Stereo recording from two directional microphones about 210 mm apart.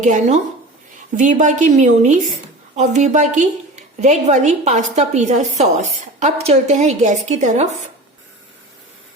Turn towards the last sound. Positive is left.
turn(degrees=-35)  # may be behind; listen again after turning